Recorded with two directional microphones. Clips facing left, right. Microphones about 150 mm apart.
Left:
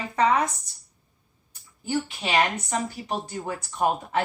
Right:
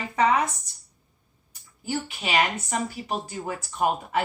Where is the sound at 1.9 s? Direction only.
10° right (ahead or behind).